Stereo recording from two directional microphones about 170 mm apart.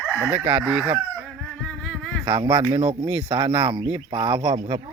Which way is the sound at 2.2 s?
25° right (ahead or behind).